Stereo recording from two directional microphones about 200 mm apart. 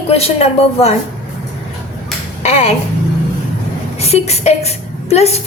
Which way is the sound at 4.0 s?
30° left (ahead or behind).